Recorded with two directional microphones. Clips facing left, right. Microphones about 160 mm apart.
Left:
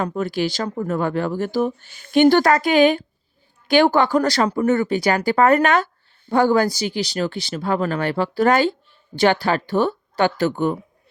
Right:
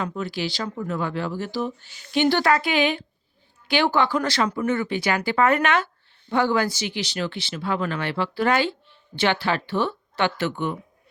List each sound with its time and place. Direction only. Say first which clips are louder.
0.0 s speech: left 6 dB; 50° left (ahead or behind)